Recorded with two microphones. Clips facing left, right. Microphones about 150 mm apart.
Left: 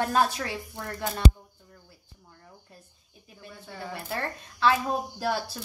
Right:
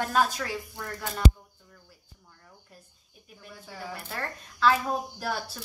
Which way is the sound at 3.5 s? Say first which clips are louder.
Left 1 dB; centre (ahead or behind).